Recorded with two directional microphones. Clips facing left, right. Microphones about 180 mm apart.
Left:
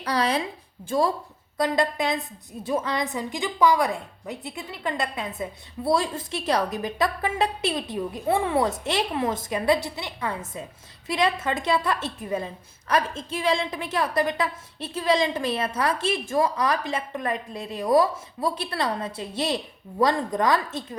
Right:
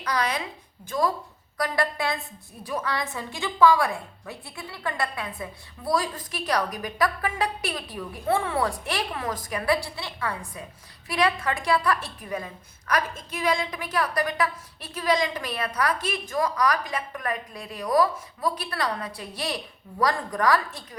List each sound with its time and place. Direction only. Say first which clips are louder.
0.0 s a woman's voice: left 3 dB; 30° left (ahead or behind)